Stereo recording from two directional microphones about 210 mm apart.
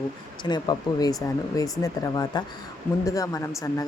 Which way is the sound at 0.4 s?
20° left (ahead or behind).